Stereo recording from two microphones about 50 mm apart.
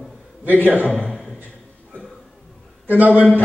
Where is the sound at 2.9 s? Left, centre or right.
Right.